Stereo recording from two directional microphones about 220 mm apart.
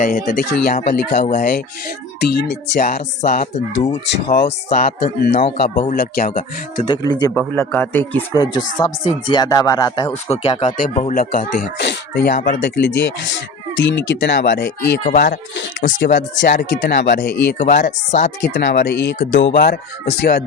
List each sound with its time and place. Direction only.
0.0 s speech: 35° left (ahead or behind)
1.1 s speech: 30° left (ahead or behind)
2.2 s speech: 45° left (ahead or behind); by 3.9 s 30° left (ahead or behind)
4.0 s speech: 50° left (ahead or behind)
6.8 s speech: 20° left (ahead or behind)
8.4 s speech: 20° left (ahead or behind); by 12.3 s 50° left (ahead or behind)
12.3 s speech: 35° left (ahead or behind)
12.5 s speech: 50° left (ahead or behind)
15.0 s speech: 35° left (ahead or behind)
15.5 s speech: 55° left (ahead or behind)
17.6 s speech: 35° left (ahead or behind)
18.4 s speech: 50° left (ahead or behind)